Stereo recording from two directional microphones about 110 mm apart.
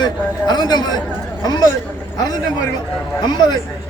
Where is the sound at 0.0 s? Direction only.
40° left (ahead or behind).